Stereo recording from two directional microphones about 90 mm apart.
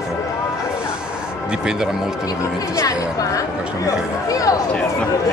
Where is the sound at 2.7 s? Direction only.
40° left (ahead or behind).